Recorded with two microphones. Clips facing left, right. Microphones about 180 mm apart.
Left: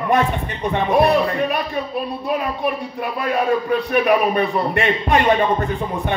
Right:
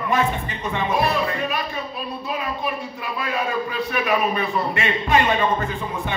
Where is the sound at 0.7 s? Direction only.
65° left (ahead or behind).